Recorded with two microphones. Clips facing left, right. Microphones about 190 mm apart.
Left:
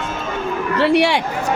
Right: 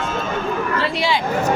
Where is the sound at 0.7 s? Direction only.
70° left (ahead or behind).